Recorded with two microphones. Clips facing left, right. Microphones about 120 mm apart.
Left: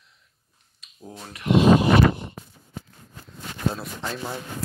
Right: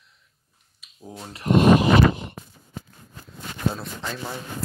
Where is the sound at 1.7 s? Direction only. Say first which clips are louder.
Even; 90° right.